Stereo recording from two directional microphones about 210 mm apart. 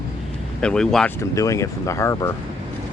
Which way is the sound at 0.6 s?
5° left (ahead or behind).